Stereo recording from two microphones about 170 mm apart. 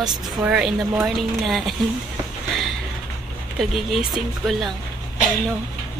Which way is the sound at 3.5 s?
Centre (ahead or behind).